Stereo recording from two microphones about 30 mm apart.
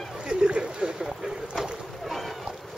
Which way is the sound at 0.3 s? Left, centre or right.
Right.